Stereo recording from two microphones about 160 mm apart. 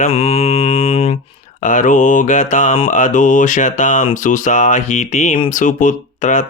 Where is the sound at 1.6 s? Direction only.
55° left (ahead or behind).